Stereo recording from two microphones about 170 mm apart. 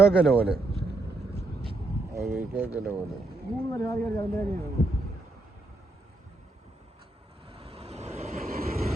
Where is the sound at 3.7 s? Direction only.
20° left (ahead or behind).